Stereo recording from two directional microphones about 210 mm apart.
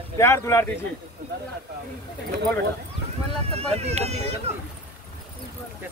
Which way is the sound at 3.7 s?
30° right (ahead or behind).